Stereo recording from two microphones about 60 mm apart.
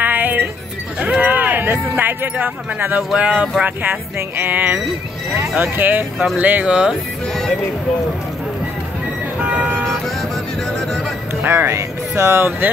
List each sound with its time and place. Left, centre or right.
0.0 s music: right
0.9 s speech: right
9.4 s car alarm: centre
11.4 s speech: right
11.7 s speech: right